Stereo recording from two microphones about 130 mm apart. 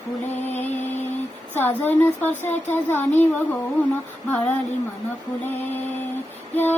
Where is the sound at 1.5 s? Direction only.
15° left (ahead or behind).